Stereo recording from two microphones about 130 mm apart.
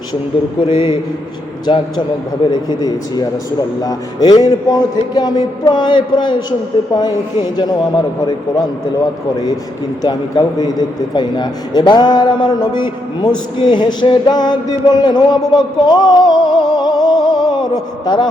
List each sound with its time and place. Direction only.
0.7 s a man's voice: 35° left (ahead or behind)
10.0 s a man's voice: 30° left (ahead or behind)